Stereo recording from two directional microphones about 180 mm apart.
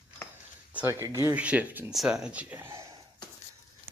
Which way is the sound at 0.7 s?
10° right (ahead or behind).